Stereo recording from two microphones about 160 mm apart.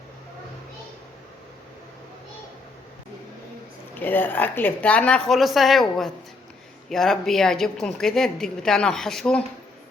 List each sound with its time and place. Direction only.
4.0 s a woman's voice: 10° left (ahead or behind)